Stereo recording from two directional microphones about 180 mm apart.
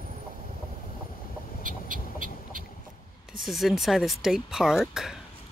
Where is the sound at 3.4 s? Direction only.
Centre (ahead or behind).